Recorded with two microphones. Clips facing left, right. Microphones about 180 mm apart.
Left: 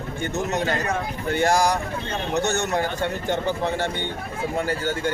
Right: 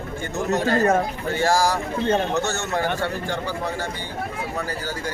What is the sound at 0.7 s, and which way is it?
Speech, 45° right (ahead or behind).